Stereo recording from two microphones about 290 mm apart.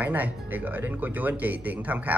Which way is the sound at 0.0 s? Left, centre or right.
Centre.